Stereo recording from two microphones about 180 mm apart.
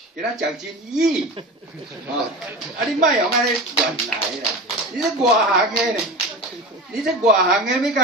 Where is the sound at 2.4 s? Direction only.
Centre (ahead or behind).